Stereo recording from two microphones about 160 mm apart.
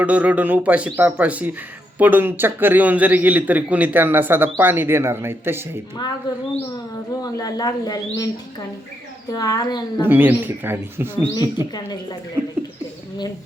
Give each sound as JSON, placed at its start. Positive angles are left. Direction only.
{"t": 0.0, "sound": "a man's voice", "side_deg": -10}
{"t": 7.1, "sound": "speech", "side_deg": 20}
{"t": 9.3, "sound": "speech", "side_deg": 25}
{"t": 10.1, "sound": "a man's voice", "side_deg": -10}
{"t": 11.3, "sound": "speech", "side_deg": 25}
{"t": 12.4, "sound": "speech", "side_deg": -15}